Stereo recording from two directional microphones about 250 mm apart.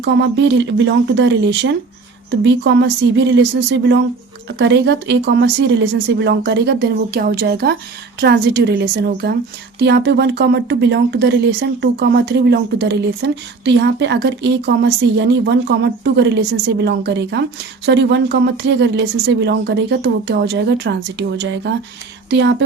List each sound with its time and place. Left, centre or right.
0.0 s a woman's voice: right